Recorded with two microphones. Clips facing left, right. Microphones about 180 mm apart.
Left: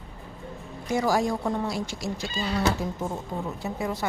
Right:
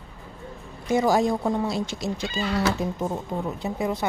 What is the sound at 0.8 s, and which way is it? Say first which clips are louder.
Speech: right 3 dB; 20° right (ahead or behind).